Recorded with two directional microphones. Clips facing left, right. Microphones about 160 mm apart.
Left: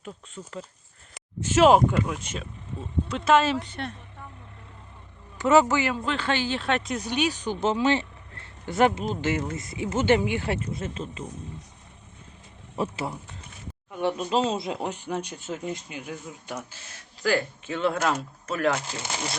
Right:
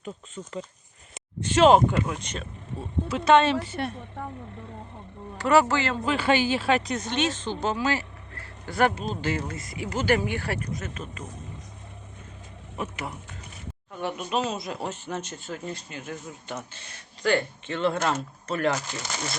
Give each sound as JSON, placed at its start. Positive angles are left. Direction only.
{"t": 0.0, "sound": "speech", "side_deg": 0}
{"t": 5.4, "sound": "speech", "side_deg": 20}
{"t": 6.1, "sound": "speech", "side_deg": -10}
{"t": 7.6, "sound": "speech", "side_deg": 25}
{"t": 12.7, "sound": "speech", "side_deg": 30}
{"t": 18.7, "sound": "speech", "side_deg": 25}